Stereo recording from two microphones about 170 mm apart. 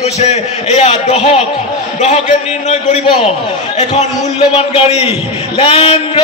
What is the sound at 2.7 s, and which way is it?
Speech, 45° left (ahead or behind).